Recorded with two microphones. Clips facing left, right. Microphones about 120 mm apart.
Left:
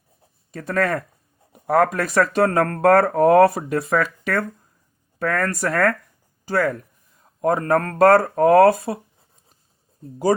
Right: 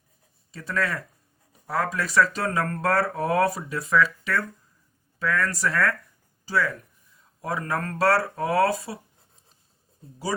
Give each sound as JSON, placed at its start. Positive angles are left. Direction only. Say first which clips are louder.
{"t": 0.5, "sound": "speech", "louder": "left 6 dB", "side_deg": 55}